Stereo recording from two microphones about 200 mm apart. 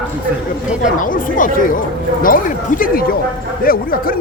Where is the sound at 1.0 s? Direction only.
40° left (ahead or behind).